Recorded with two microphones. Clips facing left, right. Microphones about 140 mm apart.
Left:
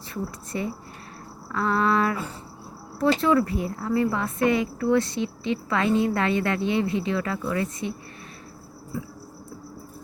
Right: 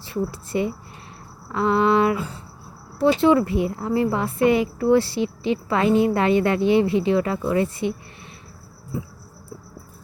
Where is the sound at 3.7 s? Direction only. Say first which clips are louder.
Right 2 dB; 30° right (ahead or behind).